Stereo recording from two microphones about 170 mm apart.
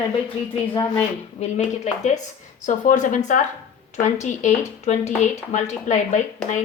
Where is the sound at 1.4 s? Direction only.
45° left (ahead or behind).